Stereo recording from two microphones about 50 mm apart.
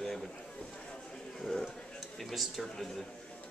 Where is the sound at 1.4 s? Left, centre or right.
Centre.